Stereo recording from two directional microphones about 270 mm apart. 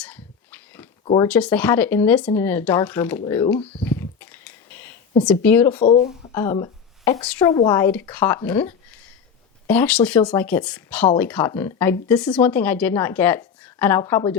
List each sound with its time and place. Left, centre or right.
0.0 s a sound: centre
1.0 s speech: centre
1.3 s speech: centre
3.8 s a sound: centre
5.2 s speech: centre
5.8 s speech: left
6.3 s speech: centre